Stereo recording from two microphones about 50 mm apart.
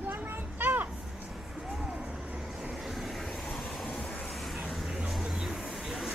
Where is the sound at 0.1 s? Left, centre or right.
Right.